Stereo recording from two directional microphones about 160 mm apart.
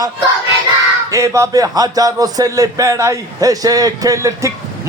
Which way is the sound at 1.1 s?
20° right (ahead or behind).